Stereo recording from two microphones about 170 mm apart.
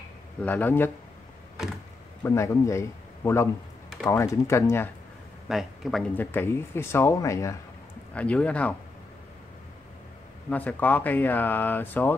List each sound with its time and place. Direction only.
0.4 s speech: 10° left (ahead or behind)
2.2 s speech: 15° left (ahead or behind)
4.1 s speech: 15° left (ahead or behind)
5.5 s speech: centre (ahead or behind); by 7.5 s 20° left (ahead or behind)
8.1 s speech: 5° left (ahead or behind)
10.5 s speech: 10° left (ahead or behind)